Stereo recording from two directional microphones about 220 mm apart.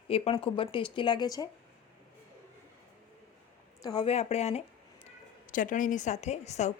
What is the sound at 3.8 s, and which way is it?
A woman's voice, 25° left (ahead or behind).